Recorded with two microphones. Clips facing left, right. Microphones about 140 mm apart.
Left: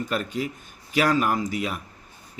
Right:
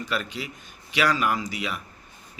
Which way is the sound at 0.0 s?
45° left (ahead or behind).